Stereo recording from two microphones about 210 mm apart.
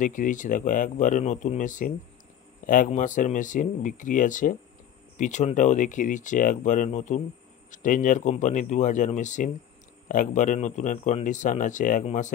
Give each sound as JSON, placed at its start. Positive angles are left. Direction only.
{"t": 0.0, "sound": "a man's voice", "side_deg": 40}